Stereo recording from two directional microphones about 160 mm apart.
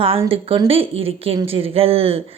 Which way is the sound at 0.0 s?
35° right (ahead or behind).